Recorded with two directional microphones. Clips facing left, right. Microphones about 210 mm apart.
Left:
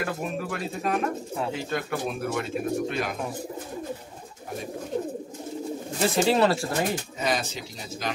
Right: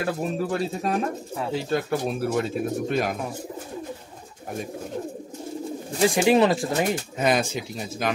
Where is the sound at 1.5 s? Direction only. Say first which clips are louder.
Right 9 dB; 35° right (ahead or behind).